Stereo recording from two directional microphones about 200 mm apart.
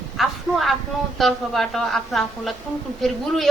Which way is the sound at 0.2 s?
Centre (ahead or behind).